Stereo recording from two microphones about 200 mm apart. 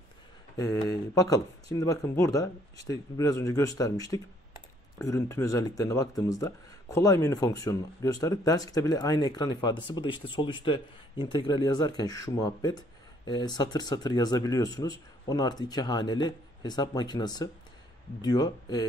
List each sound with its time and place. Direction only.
0.6 s speech: 15° left (ahead or behind)